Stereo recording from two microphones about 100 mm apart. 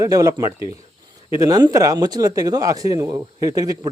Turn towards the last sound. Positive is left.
turn(degrees=-35)  # may be behind; listen again after turning